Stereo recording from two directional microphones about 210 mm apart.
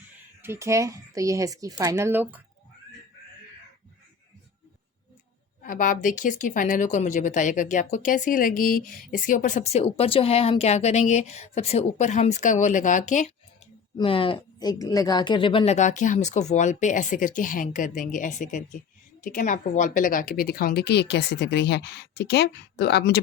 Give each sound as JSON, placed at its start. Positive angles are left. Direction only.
{"t": 0.4, "sound": "speech", "side_deg": -10}
{"t": 5.6, "sound": "speech", "side_deg": 40}
{"t": 13.9, "sound": "a woman's voice", "side_deg": 25}